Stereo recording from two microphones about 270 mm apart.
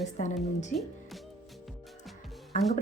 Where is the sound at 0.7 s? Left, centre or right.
Centre.